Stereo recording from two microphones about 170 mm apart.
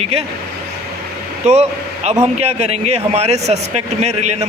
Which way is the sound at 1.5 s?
40° right (ahead or behind).